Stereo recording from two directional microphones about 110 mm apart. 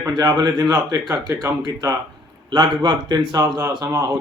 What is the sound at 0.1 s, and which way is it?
A man's voice, 40° right (ahead or behind).